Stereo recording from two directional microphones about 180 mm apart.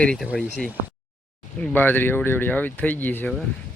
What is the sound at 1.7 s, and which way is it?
Speech, 10° left (ahead or behind).